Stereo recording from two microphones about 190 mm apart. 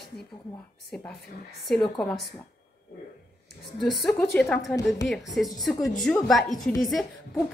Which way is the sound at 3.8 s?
Centre (ahead or behind).